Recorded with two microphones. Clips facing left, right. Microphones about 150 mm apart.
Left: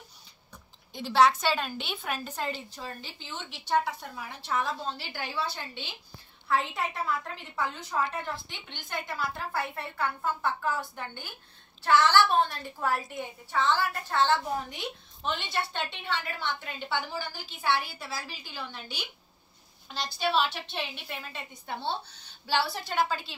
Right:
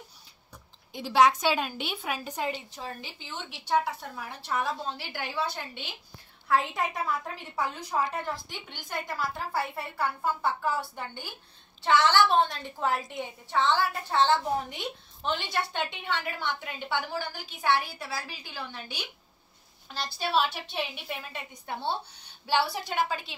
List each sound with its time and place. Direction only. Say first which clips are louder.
0.9 s a woman's voice: right 1 dB; 10° right (ahead or behind)
19.9 s a woman's voice: even; 5° right (ahead or behind)